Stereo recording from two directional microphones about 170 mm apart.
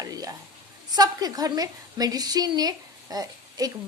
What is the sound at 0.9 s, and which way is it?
A woman's voice, 25° right (ahead or behind).